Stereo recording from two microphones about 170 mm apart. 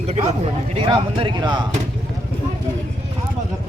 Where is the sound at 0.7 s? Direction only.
30° right (ahead or behind).